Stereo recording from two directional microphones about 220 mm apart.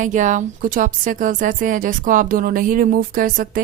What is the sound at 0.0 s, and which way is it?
Speech, 35° right (ahead or behind).